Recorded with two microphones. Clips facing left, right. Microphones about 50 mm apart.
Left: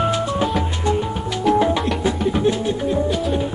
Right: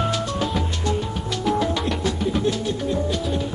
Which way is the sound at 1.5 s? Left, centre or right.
Left.